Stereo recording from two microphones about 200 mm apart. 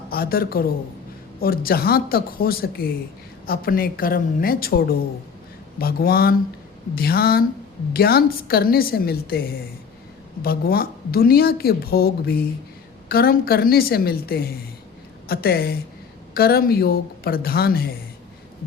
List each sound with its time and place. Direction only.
0.1 s a woman's voice: 50° left (ahead or behind)